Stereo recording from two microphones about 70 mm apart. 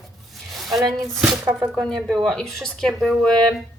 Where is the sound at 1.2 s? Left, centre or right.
Centre.